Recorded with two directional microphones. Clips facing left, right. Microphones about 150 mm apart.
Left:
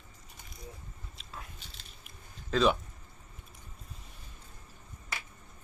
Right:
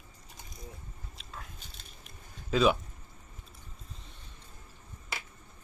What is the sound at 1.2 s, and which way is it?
Biting, centre (ahead or behind).